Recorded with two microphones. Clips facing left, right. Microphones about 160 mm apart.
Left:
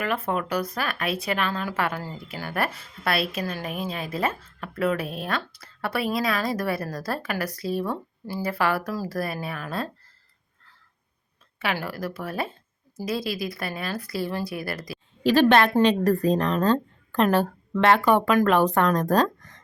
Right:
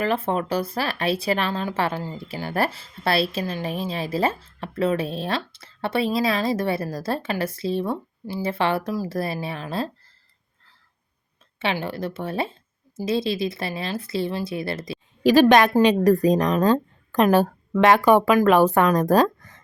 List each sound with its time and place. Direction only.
0.0 s speech: 30° right (ahead or behind)
11.6 s speech: 25° right (ahead or behind)
15.2 s a woman's voice: 10° right (ahead or behind)